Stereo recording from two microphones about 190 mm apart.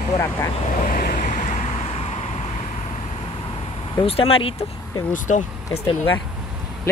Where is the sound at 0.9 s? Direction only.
45° left (ahead or behind).